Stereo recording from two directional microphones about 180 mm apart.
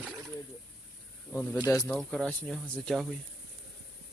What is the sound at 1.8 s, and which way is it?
Speech, 5° left (ahead or behind).